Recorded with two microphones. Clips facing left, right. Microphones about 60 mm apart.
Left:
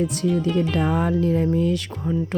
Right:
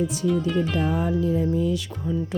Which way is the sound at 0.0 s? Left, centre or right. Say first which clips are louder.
Left 2 dB; left.